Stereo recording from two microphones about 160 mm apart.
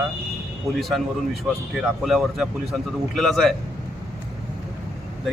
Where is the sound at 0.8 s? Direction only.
Centre (ahead or behind).